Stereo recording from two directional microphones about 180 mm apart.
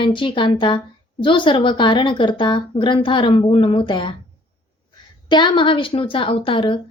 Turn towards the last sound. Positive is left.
turn(degrees=30)  # may be behind; listen again after turning